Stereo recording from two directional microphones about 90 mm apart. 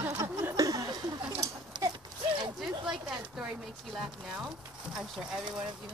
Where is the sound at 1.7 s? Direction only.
60° right (ahead or behind).